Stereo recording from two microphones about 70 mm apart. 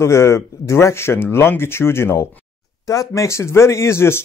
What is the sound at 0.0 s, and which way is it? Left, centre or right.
Speech, left.